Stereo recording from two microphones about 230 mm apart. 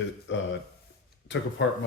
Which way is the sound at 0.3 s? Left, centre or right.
Left.